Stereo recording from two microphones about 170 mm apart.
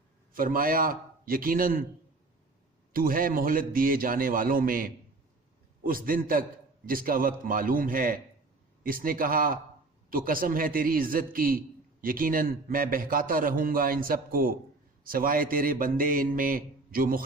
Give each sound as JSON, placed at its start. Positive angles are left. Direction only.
{"t": 0.3, "sound": "a man's voice", "side_deg": -55}
{"t": 2.9, "sound": "a man's voice", "side_deg": -55}